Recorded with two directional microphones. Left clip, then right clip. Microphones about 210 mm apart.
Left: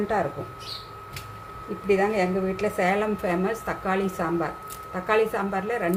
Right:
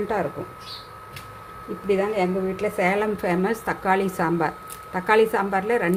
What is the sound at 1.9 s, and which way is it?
A woman's voice, 20° right (ahead or behind).